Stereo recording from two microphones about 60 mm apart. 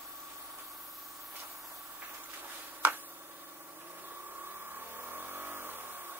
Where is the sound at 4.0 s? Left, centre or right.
Right.